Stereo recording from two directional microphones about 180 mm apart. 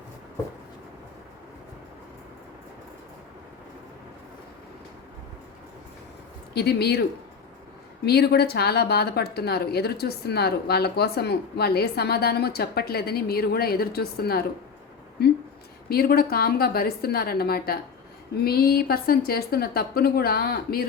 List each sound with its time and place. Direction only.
6.5 s a woman's voice: 65° left (ahead or behind)
8.0 s a woman's voice: 60° left (ahead or behind)
15.9 s a woman's voice: 55° left (ahead or behind)